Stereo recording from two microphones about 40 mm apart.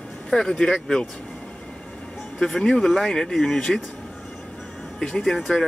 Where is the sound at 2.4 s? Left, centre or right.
Centre.